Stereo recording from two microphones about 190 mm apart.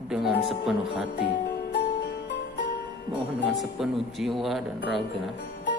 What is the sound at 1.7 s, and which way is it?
Jingle bell, 60° left (ahead or behind).